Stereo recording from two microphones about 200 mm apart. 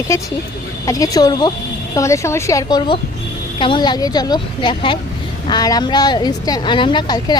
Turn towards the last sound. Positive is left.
turn(degrees=20)  # may be behind; listen again after turning